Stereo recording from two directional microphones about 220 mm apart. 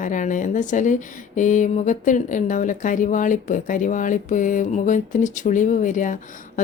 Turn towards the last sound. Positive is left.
turn(degrees=35)  # may be behind; listen again after turning